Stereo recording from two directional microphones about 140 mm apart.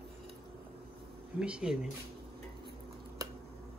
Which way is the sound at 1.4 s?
5° right (ahead or behind).